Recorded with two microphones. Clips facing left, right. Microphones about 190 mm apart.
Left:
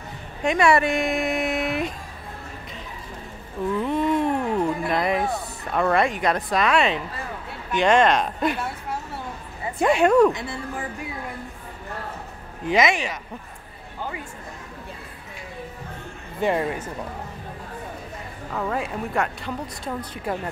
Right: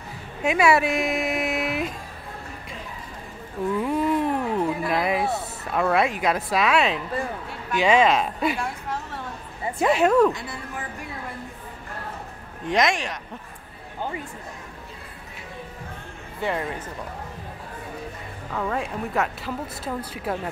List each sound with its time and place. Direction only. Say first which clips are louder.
0.4 s speech: left 1 dB; 5° right (ahead or behind)
3.8 s a sound: left 1 dB; 5° right (ahead or behind)
7.7 s a woman's voice: left 1 dB; 5° right (ahead or behind)
12.6 s speech: left 2 dB; centre (ahead or behind)
16.3 s speech: left 5 dB; 20° left (ahead or behind)
18.5 s speech: even; 5° left (ahead or behind)